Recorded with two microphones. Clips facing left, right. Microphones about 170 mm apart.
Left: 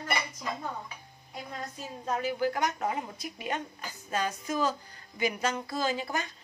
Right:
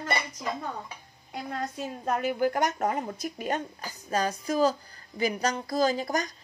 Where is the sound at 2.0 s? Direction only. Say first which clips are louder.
Right 3 dB; 55° right (ahead or behind).